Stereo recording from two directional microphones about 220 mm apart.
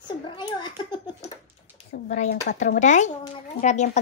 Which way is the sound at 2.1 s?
35° left (ahead or behind).